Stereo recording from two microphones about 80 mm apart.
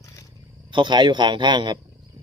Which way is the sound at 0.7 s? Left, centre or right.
Right.